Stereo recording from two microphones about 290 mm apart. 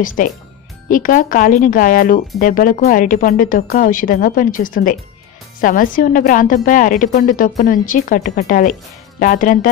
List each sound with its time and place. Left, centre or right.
0.2 s speech: left